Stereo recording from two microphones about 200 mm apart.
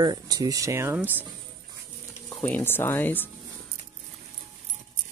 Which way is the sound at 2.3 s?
10° left (ahead or behind).